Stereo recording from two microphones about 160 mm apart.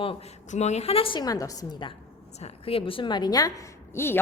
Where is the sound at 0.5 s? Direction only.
45° left (ahead or behind); by 1.9 s 25° left (ahead or behind).